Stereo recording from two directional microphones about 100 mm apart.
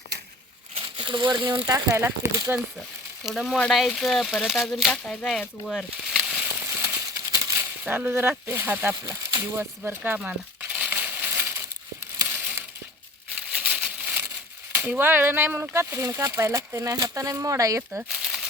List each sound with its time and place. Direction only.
0.8 s speech: 55° right (ahead or behind); by 2.6 s 30° right (ahead or behind)
3.2 s speech: centre (ahead or behind)
6.1 s a sound: 15° right (ahead or behind)
7.6 s speech: 20° right (ahead or behind)
12.2 s a sound: 25° right (ahead or behind)
14.7 s speech: 25° right (ahead or behind)
17.9 s crumpling: 5° right (ahead or behind)